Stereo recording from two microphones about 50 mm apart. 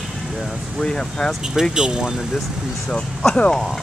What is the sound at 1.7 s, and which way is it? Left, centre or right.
Speech, centre.